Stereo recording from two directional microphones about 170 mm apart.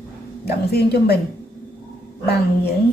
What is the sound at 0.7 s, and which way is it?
Speech, 70° left (ahead or behind).